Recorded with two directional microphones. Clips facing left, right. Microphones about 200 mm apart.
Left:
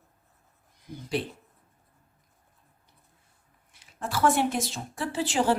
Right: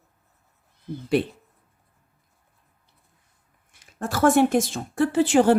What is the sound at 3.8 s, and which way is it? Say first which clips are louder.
A woman's voice: right 5 dB; 45° right (ahead or behind).